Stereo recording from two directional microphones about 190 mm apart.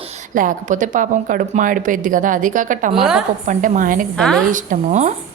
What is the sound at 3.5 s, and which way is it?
Speech, 45° right (ahead or behind).